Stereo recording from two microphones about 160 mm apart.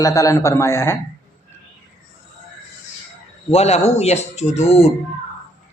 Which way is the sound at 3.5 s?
40° left (ahead or behind).